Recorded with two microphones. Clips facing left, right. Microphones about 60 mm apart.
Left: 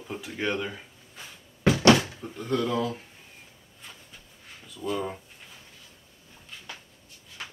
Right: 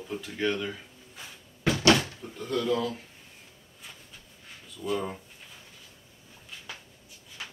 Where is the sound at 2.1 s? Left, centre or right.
Centre.